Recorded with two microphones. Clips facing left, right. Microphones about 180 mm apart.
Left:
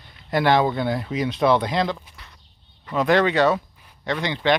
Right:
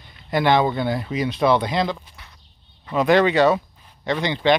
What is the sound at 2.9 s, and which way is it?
Speech, 15° right (ahead or behind).